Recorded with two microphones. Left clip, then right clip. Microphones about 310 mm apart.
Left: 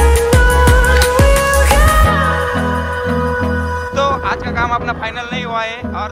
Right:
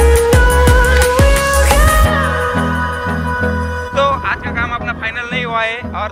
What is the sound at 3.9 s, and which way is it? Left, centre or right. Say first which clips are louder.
Music: right 2 dB; centre.